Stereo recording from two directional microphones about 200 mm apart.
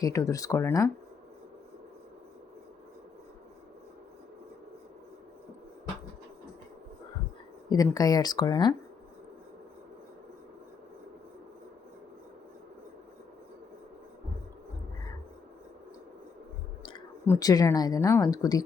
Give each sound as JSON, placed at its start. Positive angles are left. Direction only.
{"t": 0.0, "sound": "speech", "side_deg": 15}
{"t": 7.7, "sound": "speech", "side_deg": 20}
{"t": 17.2, "sound": "speech", "side_deg": 20}